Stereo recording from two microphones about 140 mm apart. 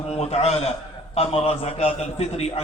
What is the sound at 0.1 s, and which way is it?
A man's voice, 50° left (ahead or behind).